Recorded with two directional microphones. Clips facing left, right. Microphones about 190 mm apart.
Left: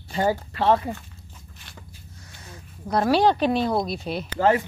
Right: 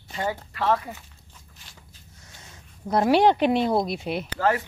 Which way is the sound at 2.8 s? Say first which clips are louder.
Right 1 dB; 20° right (ahead or behind).